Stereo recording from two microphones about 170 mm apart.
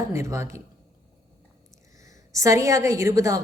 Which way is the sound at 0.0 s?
15° right (ahead or behind).